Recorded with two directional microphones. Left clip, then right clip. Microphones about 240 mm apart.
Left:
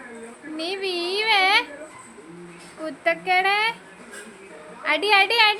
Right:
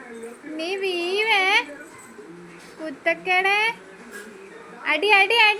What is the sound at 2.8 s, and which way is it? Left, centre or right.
Speech, centre.